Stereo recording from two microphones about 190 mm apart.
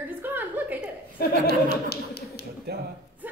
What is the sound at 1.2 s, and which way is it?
Chuckle, 55° left (ahead or behind).